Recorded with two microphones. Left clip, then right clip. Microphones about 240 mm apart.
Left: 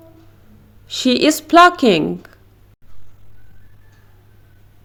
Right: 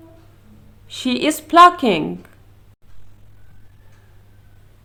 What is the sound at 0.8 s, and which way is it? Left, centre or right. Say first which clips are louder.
Speech: left 5 dB; left.